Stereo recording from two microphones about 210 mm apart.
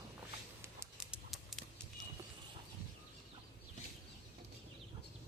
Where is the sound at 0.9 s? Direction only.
Centre (ahead or behind).